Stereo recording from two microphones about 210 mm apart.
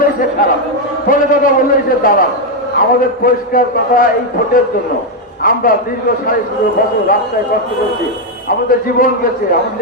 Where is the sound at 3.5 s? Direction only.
40° left (ahead or behind).